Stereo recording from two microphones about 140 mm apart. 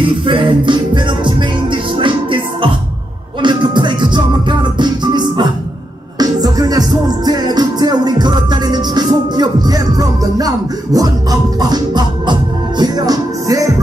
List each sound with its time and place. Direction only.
0.0 s music: 35° right (ahead or behind)